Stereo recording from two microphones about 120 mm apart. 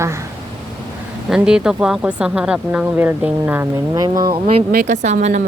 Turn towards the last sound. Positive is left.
turn(degrees=-70)  # may be behind; listen again after turning